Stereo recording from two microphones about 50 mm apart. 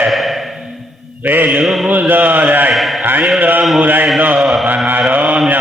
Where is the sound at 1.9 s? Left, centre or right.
Right.